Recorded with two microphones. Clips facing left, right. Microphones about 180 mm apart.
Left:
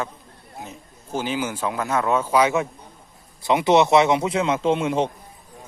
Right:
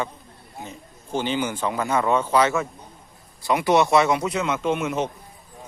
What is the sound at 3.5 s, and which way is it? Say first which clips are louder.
Speech: left 2 dB; 25° left (ahead or behind).